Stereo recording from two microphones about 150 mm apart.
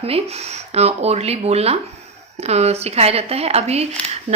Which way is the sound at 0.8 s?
45° right (ahead or behind).